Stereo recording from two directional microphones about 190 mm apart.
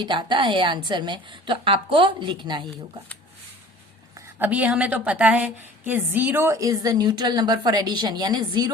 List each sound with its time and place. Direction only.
0.0 s a woman's voice: 25° right (ahead or behind)
4.4 s a woman's voice: 10° right (ahead or behind)